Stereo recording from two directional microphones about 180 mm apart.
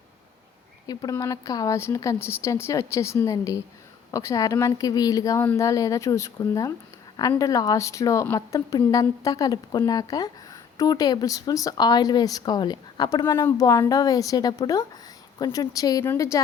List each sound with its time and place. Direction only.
0.9 s speech: 20° left (ahead or behind)